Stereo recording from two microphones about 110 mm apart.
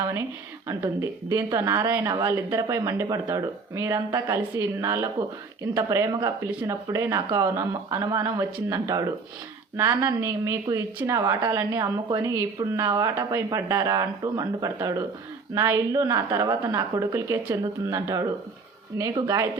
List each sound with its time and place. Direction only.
1.3 s speech: 30° right (ahead or behind)